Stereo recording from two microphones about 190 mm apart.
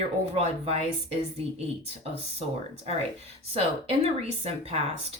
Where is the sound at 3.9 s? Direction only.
30° right (ahead or behind).